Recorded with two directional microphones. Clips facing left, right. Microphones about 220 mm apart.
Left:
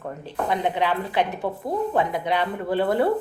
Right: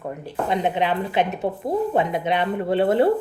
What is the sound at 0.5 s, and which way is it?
A woman's voice, 20° right (ahead or behind).